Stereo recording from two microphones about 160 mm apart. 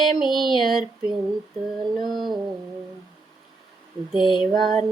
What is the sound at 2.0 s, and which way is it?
Mantra, centre (ahead or behind).